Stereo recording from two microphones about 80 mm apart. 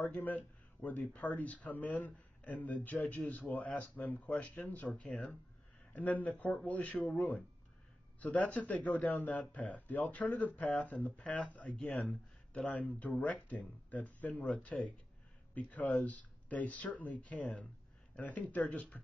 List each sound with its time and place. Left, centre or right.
0.1 s a man's voice: left
11.9 s speech: centre
12.5 s a man's voice: centre